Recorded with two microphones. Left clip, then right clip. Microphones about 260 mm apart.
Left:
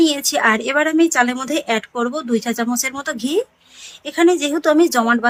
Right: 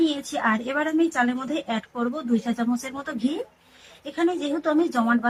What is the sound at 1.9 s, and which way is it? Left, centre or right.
Speech, left.